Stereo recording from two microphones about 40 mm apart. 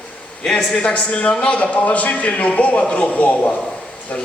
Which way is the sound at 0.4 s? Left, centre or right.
Centre.